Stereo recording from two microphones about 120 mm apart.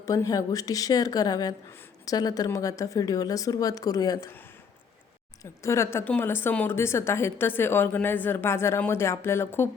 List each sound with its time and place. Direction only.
0.0 s speech: 30° left (ahead or behind)
5.4 s a woman's voice: 25° left (ahead or behind)